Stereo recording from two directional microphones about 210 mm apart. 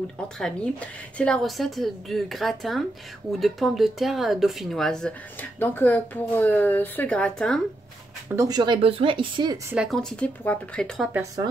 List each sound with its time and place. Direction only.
0.4 s speech: 5° left (ahead or behind)
8.4 s speech: 20° right (ahead or behind)
9.7 s speech: centre (ahead or behind)